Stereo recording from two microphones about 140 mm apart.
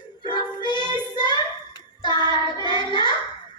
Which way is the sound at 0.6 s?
35° right (ahead or behind).